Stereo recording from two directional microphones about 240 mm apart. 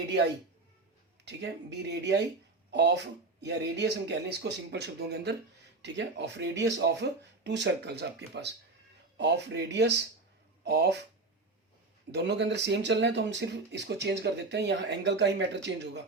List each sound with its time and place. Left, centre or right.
1.2 s speech: right
12.1 s speech: right